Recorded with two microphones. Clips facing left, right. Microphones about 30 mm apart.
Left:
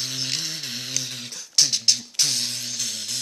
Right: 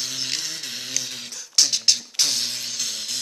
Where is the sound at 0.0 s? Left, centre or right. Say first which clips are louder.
Even; centre.